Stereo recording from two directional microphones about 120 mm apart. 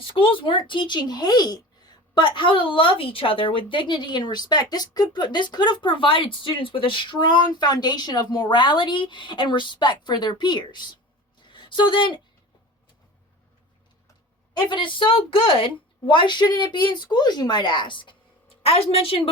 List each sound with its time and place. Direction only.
0.0 s a woman's voice: 45° left (ahead or behind)
11.3 s a sound: 40° left (ahead or behind)
14.7 s a woman's voice: 45° left (ahead or behind)